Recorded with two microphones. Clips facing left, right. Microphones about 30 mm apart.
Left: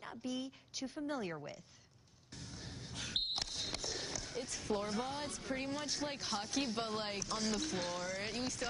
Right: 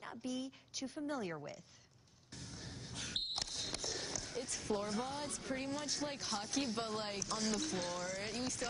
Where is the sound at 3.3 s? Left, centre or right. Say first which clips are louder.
Left 1 dB; centre.